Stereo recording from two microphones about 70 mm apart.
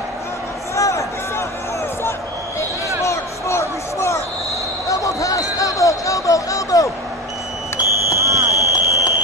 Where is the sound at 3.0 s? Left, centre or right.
Left.